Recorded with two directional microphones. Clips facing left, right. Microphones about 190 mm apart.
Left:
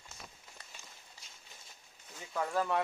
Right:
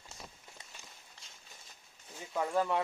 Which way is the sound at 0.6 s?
20° right (ahead or behind).